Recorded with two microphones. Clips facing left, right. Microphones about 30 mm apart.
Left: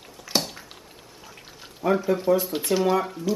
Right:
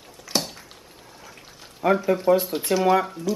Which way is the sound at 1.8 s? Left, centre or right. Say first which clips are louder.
Right 2 dB; right.